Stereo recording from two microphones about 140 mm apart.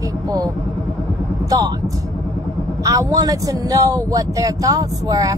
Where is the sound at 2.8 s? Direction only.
25° right (ahead or behind).